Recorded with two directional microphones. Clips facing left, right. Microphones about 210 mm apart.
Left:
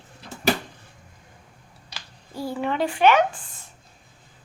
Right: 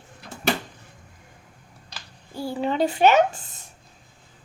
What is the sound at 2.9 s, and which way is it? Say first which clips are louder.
Speech: even; 40° right (ahead or behind).